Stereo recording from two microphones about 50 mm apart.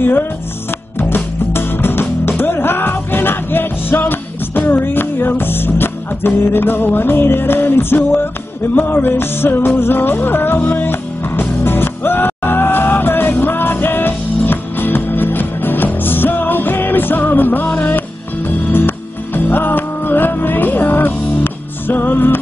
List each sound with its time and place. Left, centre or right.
0.0 s music: left